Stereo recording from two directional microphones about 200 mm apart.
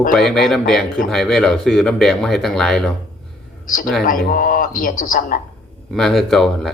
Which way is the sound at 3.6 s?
40° left (ahead or behind).